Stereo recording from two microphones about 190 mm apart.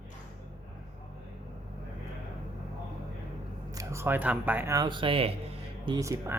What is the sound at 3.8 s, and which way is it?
Speech, 15° right (ahead or behind).